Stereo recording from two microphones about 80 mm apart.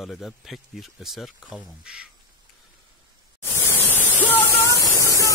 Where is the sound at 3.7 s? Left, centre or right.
Right.